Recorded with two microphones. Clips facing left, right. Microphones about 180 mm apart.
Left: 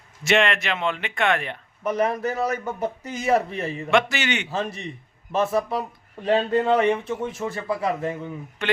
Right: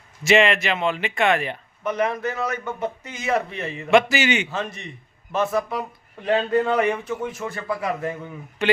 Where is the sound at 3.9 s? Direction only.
5° right (ahead or behind).